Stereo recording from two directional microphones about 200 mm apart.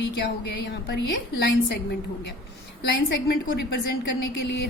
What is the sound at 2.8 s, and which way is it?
A woman's voice, 55° left (ahead or behind).